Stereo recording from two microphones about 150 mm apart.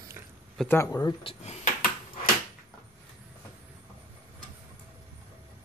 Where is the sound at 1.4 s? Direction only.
45° left (ahead or behind).